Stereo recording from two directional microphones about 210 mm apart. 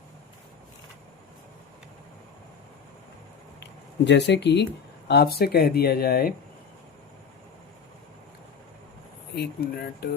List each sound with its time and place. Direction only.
3.6 s speech: 55° left (ahead or behind)
9.3 s speech: 50° left (ahead or behind)